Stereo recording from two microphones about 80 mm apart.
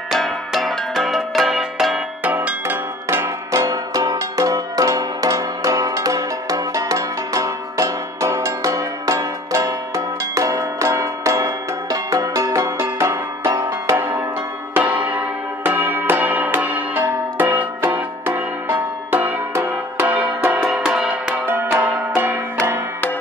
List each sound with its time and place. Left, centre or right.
0.1 s music: centre
2.2 s music: right
14.7 s church bell: right
19.5 s music: right; by 21.1 s centre
21.1 s music: right